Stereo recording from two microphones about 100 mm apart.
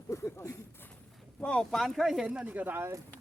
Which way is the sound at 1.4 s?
10° left (ahead or behind).